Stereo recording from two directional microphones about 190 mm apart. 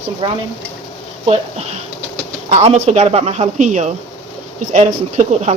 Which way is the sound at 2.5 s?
35° right (ahead or behind).